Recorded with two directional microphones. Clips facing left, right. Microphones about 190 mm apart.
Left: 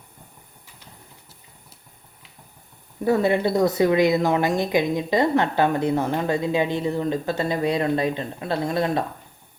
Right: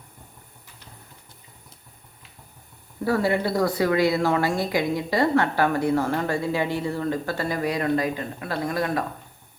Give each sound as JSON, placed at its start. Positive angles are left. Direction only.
{"t": 3.0, "sound": "a woman's voice", "side_deg": 20}